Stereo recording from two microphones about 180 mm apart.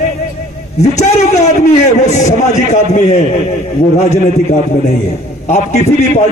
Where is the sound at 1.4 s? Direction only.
40° left (ahead or behind).